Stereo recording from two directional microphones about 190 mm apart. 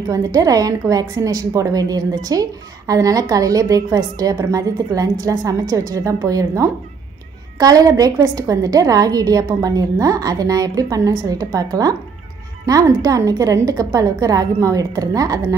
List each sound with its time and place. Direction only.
0.1 s a woman's voice: 20° right (ahead or behind)